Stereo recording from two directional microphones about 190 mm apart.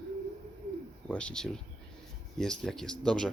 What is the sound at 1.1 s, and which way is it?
Speech, 5° left (ahead or behind).